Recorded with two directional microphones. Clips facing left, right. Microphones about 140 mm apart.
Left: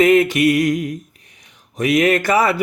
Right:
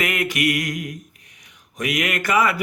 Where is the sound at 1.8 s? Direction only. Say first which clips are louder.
Left 9 dB; 30° left (ahead or behind).